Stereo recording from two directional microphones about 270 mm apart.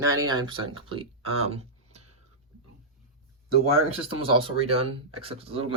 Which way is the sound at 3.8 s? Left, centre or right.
Left.